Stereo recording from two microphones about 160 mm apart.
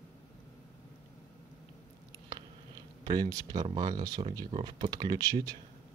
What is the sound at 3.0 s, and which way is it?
Speech, 25° right (ahead or behind).